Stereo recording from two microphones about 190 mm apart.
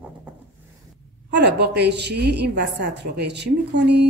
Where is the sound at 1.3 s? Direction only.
60° right (ahead or behind).